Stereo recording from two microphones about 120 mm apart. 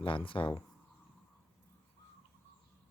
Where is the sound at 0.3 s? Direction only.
45° left (ahead or behind).